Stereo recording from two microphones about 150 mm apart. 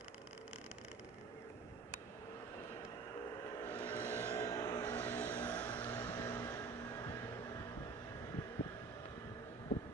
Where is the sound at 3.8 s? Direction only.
10° left (ahead or behind).